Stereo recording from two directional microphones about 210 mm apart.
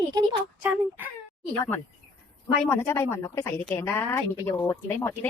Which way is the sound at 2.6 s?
10° left (ahead or behind).